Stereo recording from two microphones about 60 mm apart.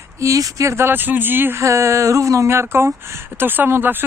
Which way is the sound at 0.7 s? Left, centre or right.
Right.